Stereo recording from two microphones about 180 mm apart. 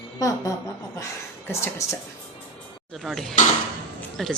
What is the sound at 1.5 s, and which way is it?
Speech, 15° left (ahead or behind).